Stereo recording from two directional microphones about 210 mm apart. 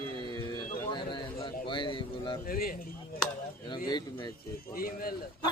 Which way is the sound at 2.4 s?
45° left (ahead or behind).